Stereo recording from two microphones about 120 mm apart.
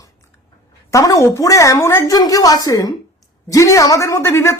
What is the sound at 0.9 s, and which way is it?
Speech, 30° left (ahead or behind).